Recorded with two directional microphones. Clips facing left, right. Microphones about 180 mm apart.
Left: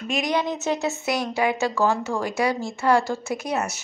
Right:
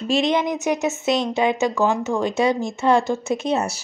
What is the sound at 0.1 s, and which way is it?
A woman's voice, 25° right (ahead or behind).